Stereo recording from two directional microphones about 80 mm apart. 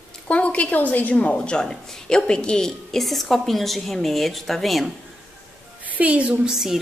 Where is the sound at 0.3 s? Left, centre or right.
Centre.